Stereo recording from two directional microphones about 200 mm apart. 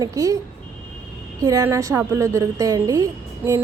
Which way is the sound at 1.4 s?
15° right (ahead or behind).